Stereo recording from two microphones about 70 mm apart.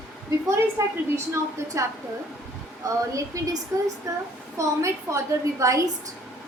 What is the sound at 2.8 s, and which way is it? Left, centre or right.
Speech, right.